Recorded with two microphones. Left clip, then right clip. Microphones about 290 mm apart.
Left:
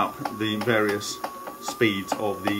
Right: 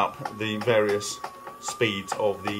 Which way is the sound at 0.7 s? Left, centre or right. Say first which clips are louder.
Right 2 dB; centre.